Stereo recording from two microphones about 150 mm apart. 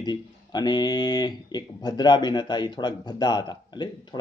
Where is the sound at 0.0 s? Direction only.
30° left (ahead or behind).